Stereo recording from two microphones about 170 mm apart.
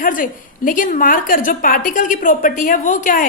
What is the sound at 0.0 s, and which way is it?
A woman's voice, 55° left (ahead or behind).